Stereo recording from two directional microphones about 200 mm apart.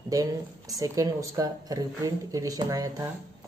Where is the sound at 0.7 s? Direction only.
15° right (ahead or behind).